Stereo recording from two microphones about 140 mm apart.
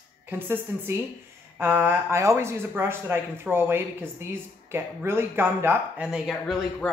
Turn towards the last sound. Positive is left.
turn(degrees=0)  # may be behind; listen again after turning